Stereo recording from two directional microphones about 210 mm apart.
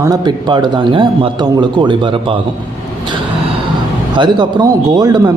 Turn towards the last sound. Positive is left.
turn(degrees=-20)  # may be behind; listen again after turning